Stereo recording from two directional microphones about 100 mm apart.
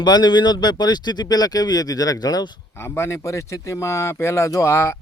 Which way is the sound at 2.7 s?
25° left (ahead or behind).